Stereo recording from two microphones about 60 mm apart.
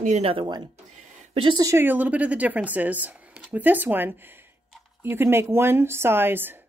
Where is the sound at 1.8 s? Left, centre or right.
Right.